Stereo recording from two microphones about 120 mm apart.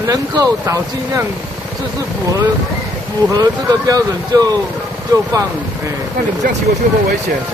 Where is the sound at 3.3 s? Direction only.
30° right (ahead or behind).